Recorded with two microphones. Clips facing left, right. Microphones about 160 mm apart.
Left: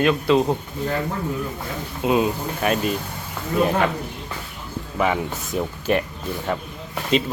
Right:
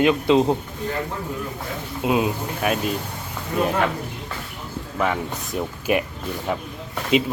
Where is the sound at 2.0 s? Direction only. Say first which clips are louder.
Left 1 dB; 5° right (ahead or behind).